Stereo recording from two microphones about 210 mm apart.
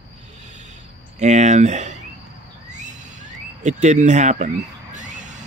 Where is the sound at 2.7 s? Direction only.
35° right (ahead or behind).